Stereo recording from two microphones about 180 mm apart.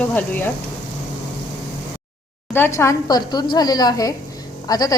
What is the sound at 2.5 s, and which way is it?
Speech, 15° left (ahead or behind).